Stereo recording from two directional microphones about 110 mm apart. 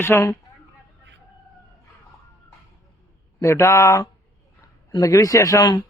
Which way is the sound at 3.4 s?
25° left (ahead or behind).